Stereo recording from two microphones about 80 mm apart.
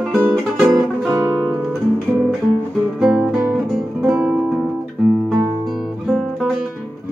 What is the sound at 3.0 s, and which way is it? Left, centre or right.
Music, centre.